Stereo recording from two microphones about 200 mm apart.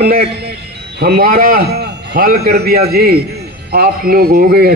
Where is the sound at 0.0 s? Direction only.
50° right (ahead or behind).